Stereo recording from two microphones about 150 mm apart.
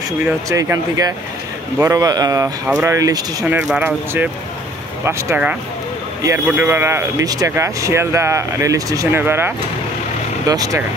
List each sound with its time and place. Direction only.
0.5 s speech: 20° right (ahead or behind)
3.6 s speech: 10° right (ahead or behind)
10.5 s speech: 25° right (ahead or behind)